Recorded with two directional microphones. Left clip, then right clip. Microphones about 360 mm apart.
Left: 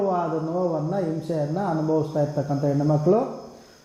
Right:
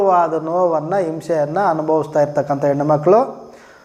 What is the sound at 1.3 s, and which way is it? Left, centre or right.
A man's voice, centre.